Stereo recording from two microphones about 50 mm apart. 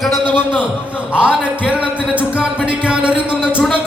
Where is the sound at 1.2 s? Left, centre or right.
Right.